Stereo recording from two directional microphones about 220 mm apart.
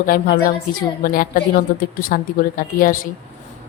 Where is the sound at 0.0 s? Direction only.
40° left (ahead or behind).